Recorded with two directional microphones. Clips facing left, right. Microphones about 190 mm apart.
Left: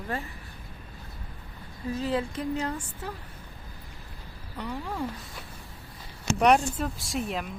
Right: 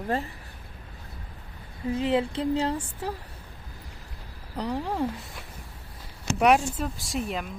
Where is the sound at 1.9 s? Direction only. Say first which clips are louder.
Right 4 dB; 25° right (ahead or behind).